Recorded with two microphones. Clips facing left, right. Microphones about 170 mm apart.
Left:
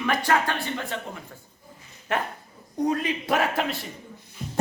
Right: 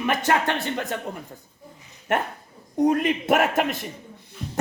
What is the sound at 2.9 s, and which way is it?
Speech, 50° right (ahead or behind).